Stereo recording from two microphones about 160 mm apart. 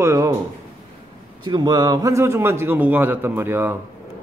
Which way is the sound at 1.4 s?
25° right (ahead or behind).